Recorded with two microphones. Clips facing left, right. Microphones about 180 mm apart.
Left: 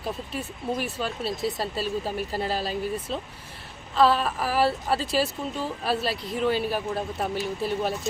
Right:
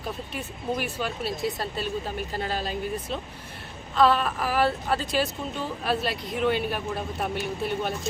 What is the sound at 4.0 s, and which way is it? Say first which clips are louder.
Speech: even; centre (ahead or behind).